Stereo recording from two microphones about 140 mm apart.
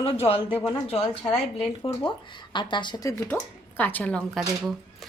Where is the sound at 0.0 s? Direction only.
45° left (ahead or behind).